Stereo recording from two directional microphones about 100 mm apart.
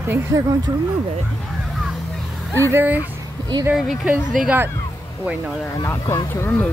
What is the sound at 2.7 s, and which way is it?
Speech, 15° right (ahead or behind).